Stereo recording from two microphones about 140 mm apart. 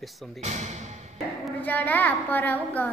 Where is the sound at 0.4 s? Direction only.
55° right (ahead or behind).